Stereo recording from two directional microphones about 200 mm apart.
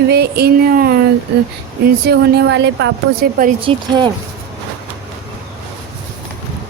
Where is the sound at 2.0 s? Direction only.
55° right (ahead or behind).